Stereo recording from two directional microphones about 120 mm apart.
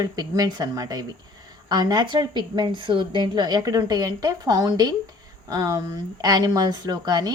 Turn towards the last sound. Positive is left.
turn(degrees=-35)  # may be behind; listen again after turning